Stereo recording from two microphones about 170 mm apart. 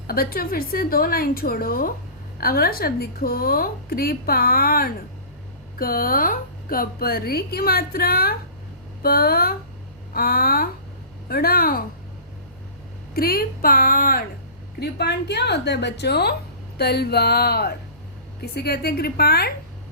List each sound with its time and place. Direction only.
0.1 s a woman's voice: 60° left (ahead or behind)
13.1 s a woman's voice: 60° left (ahead or behind)
14.8 s a woman's voice: 75° left (ahead or behind)